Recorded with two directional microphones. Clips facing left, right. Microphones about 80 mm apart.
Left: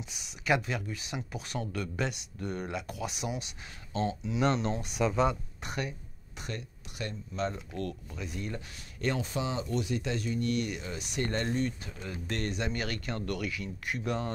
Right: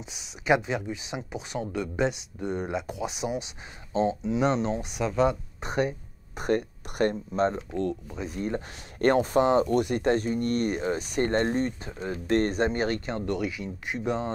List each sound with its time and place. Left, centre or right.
0.5 s speech: right
5.6 s speech: right
6.3 s speech: right
7.7 s speech: centre
8.3 s speech: right
9.0 s speech: right